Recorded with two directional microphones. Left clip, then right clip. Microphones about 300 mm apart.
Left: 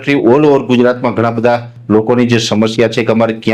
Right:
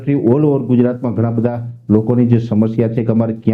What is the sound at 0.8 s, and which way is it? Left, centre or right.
Speech, centre.